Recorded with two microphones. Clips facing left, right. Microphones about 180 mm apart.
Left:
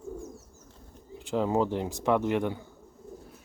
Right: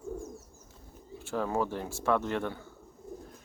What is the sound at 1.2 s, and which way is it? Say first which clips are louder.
Speech: left 4 dB; 15° left (ahead or behind).